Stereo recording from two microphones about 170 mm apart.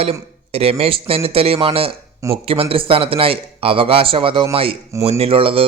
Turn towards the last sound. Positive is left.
turn(degrees=-30)  # may be behind; listen again after turning